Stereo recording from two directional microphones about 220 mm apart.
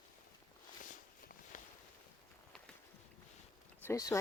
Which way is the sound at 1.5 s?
35° left (ahead or behind).